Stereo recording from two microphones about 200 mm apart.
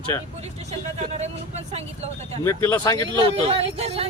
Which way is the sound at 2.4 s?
10° left (ahead or behind).